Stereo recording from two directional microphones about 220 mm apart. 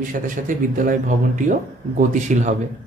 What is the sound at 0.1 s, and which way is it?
A man's voice, 35° right (ahead or behind).